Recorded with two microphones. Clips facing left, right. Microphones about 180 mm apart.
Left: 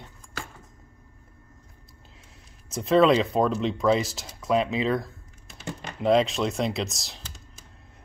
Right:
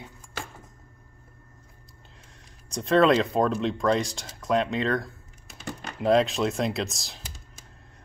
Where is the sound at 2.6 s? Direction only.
5° left (ahead or behind).